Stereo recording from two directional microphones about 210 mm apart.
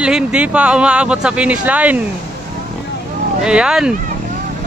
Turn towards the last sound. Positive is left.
turn(degrees=-5)  # may be behind; listen again after turning